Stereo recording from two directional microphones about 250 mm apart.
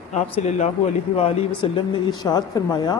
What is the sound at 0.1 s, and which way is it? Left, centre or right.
Speech, left.